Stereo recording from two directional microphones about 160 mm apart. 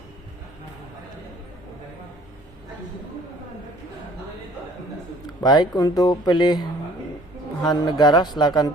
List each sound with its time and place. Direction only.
5.4 s speech: 25° left (ahead or behind)